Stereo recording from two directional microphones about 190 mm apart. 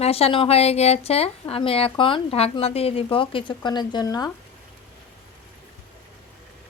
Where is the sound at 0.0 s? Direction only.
30° left (ahead or behind).